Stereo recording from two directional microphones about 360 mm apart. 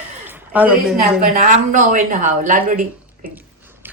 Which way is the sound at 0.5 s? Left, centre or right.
Centre.